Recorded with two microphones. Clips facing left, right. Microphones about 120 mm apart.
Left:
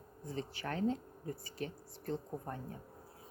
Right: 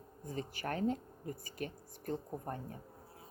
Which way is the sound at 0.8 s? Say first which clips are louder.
Left 1 dB; 5° right (ahead or behind).